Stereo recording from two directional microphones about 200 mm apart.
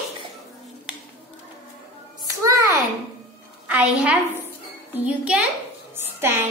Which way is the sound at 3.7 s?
5° right (ahead or behind).